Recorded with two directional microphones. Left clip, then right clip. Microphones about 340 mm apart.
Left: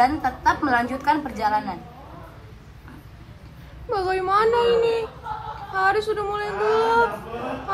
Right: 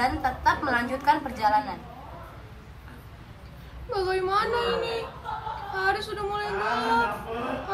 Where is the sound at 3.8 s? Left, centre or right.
Centre.